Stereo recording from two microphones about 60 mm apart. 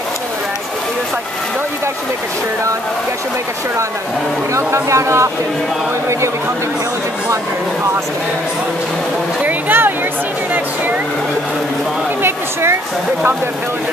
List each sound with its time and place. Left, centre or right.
4.6 s speech: right
9.4 s speech: right
12.2 s speech: right